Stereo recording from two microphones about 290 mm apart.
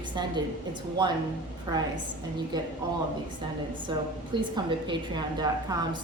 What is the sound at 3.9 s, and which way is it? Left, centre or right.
A woman's voice, centre.